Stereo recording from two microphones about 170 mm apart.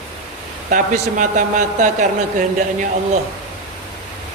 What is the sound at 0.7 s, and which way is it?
A man's voice, 50° right (ahead or behind).